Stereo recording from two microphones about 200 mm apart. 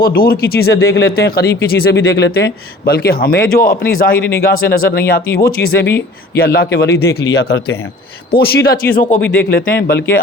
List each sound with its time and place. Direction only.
0.0 s speech: 50° left (ahead or behind)